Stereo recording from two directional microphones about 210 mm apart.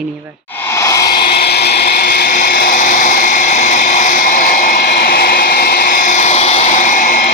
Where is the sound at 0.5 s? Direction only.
10° left (ahead or behind).